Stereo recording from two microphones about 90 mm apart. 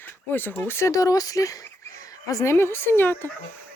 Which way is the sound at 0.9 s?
45° left (ahead or behind).